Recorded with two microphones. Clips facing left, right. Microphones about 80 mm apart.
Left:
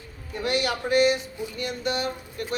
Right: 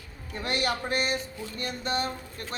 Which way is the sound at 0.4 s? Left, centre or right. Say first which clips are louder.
Left 3 dB; right.